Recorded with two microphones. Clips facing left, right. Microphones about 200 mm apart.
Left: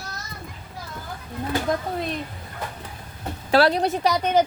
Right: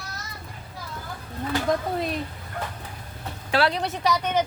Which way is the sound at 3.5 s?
40° left (ahead or behind).